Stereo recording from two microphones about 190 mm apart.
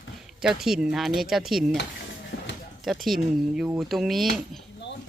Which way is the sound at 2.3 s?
80° left.